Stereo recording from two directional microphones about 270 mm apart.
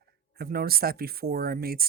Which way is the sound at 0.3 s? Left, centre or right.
Right.